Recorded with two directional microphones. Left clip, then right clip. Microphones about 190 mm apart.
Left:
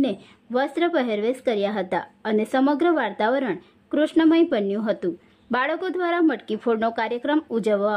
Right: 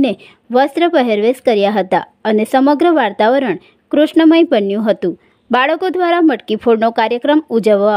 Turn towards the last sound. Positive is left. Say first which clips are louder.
# right 10 dB
turn(degrees=-35)  # may be behind; listen again after turning